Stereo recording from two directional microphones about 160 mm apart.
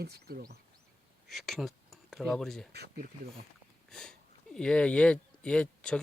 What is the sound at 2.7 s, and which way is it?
Speech, 90° right.